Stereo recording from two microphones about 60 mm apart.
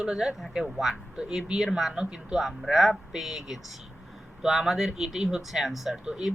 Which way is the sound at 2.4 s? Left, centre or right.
Centre.